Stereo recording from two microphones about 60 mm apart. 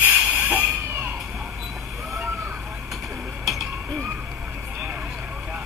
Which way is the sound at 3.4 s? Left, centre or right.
Centre.